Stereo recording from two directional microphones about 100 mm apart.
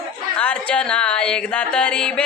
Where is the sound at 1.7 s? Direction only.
10° left (ahead or behind).